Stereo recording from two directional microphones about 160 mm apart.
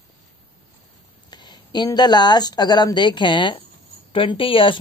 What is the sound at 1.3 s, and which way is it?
Speech, 25° left (ahead or behind).